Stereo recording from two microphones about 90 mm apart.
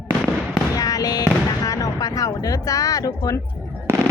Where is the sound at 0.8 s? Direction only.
45° left (ahead or behind).